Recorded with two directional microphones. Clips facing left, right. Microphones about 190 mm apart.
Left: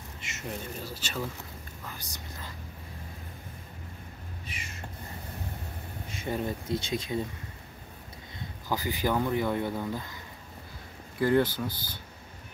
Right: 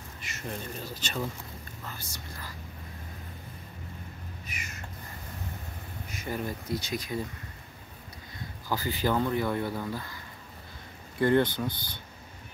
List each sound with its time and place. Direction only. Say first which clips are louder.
0.5 s speech: even; 10° left (ahead or behind)
4.5 s a sound: left 1 dB; 30° left (ahead or behind)
6.0 s speech: left 2 dB; 25° left (ahead or behind)
8.6 s speech: even; 15° left (ahead or behind)
11.1 s speech: right 1 dB; 5° left (ahead or behind)